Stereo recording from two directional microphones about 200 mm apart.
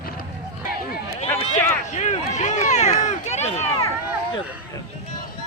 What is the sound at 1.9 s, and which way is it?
Speech, 35° left (ahead or behind).